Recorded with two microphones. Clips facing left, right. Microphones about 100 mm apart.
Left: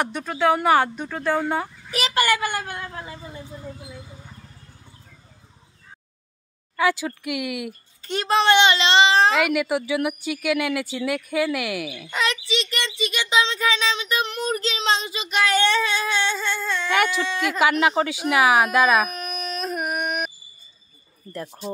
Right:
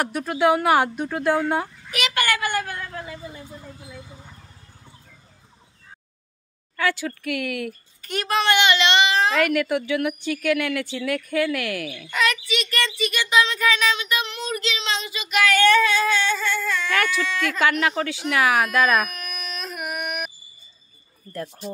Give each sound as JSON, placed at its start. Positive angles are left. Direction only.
{"t": 0.0, "sound": "speech", "side_deg": -10}
{"t": 1.9, "sound": "a sound", "side_deg": 35}
{"t": 2.5, "sound": "speech", "side_deg": 20}
{"t": 6.8, "sound": "a woman's voice", "side_deg": 15}
{"t": 8.0, "sound": "speech", "side_deg": 25}
{"t": 9.3, "sound": "a woman's voice", "side_deg": 15}
{"t": 12.1, "sound": "a woman's voice", "side_deg": 25}
{"t": 19.0, "sound": "a sound", "side_deg": 35}